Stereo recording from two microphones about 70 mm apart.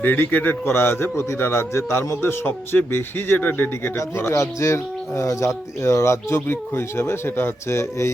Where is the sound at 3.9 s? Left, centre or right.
Left.